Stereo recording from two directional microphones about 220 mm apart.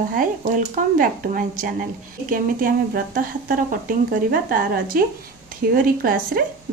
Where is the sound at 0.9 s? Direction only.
40° right (ahead or behind).